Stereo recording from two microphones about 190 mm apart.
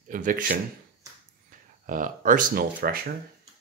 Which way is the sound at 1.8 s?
45° right (ahead or behind).